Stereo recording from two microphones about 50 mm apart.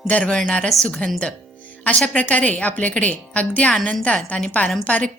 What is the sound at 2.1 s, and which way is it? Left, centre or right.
A woman's voice, left.